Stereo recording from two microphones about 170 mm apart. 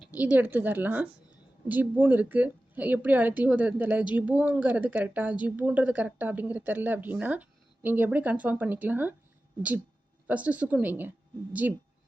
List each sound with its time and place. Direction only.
0.1 s speech: 10° right (ahead or behind)
10.2 s speech: 10° right (ahead or behind)